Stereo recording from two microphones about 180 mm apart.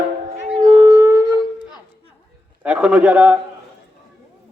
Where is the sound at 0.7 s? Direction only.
25° right (ahead or behind).